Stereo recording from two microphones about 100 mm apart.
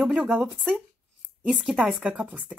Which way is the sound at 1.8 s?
10° right (ahead or behind).